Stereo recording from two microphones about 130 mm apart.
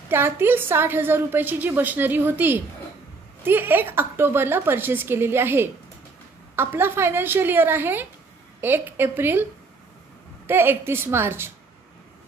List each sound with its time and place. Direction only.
0.1 s a woman's voice: 15° right (ahead or behind)